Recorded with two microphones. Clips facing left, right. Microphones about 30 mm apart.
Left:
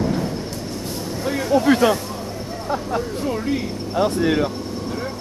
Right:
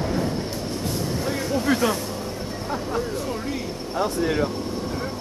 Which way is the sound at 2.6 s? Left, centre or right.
Left.